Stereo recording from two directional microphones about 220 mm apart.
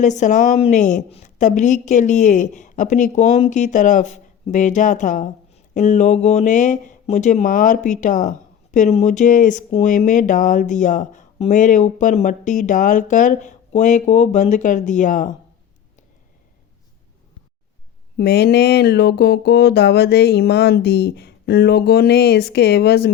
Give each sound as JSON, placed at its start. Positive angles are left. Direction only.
{"t": 0.0, "sound": "a woman's voice", "side_deg": 35}
{"t": 18.2, "sound": "speech", "side_deg": 45}